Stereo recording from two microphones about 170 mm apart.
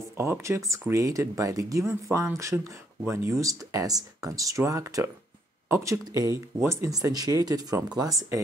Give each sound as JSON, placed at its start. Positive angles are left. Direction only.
{"t": 0.2, "sound": "speech", "side_deg": -15}